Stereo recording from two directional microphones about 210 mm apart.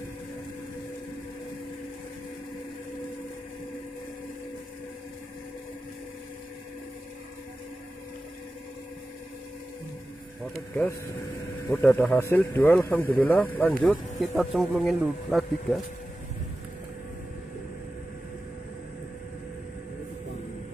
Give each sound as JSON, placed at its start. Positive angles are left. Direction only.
{"t": 10.4, "sound": "speech", "side_deg": 0}